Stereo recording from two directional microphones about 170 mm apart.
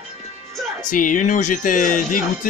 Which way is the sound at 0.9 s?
50° left (ahead or behind).